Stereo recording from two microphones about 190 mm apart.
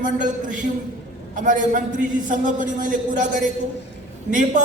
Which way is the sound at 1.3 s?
40° right (ahead or behind).